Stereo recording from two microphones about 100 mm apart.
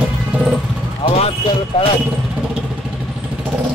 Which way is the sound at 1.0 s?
85° left.